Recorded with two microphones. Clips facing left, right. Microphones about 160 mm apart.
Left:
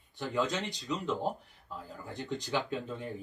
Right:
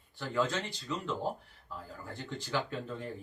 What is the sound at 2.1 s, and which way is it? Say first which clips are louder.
Speech: left 3 dB; 15° left (ahead or behind).